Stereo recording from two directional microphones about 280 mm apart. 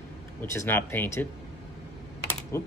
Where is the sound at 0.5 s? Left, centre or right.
Centre.